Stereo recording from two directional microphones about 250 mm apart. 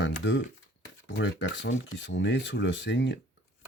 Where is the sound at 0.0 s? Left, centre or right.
Left.